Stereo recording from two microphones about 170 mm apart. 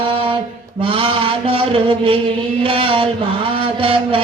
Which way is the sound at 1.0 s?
30° right (ahead or behind).